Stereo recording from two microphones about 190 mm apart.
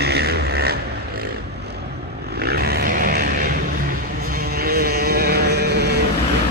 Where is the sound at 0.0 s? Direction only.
55° right (ahead or behind).